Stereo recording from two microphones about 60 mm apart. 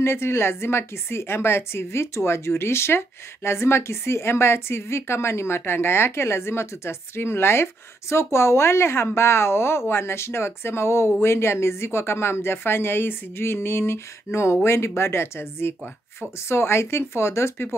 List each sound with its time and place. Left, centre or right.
0.0 s a woman's voice: left